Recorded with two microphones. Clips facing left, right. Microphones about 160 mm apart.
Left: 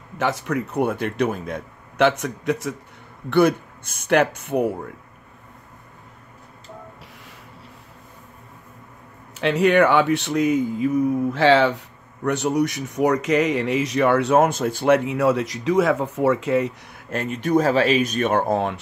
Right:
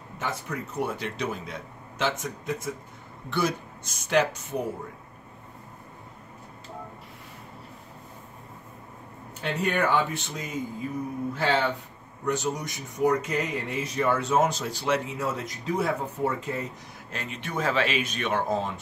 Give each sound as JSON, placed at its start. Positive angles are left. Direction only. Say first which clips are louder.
{"t": 0.2, "sound": "speech", "louder": "left 9 dB", "side_deg": 80}
{"t": 3.3, "sound": "speech", "louder": "left 10 dB", "side_deg": 60}
{"t": 9.3, "sound": "speech", "louder": "left 10 dB", "side_deg": 90}
{"t": 12.2, "sound": "speech", "louder": "left 8 dB", "side_deg": 70}
{"t": 17.1, "sound": "speech", "louder": "left 14 dB", "side_deg": 50}